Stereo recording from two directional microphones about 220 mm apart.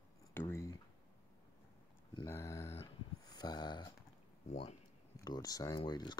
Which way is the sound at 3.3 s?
20° left (ahead or behind).